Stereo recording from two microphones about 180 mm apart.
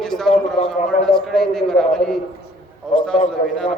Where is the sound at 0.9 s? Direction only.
5° left (ahead or behind).